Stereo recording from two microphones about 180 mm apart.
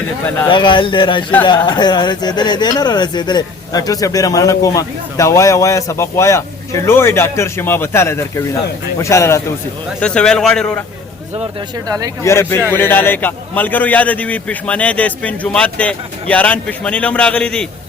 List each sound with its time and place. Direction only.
0.5 s a man's voice: 25° left (ahead or behind)
10.0 s a man's voice: 5° left (ahead or behind)
11.9 s speech: 20° right (ahead or behind)
12.2 s a man's voice: 15° left (ahead or behind)